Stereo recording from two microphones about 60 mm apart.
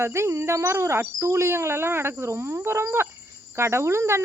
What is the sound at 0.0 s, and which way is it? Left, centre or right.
Speech, right.